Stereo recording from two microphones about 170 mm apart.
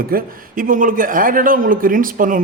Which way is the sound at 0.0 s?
60° right (ahead or behind).